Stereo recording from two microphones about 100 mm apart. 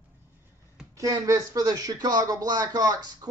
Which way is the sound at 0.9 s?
35° right (ahead or behind).